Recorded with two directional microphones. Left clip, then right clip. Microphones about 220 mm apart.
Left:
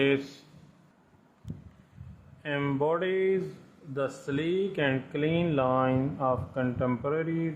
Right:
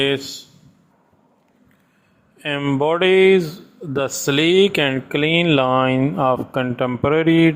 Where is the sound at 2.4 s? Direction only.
40° right (ahead or behind).